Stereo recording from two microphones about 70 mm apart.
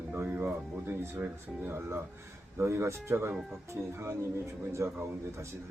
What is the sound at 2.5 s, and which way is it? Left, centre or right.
Speech, right.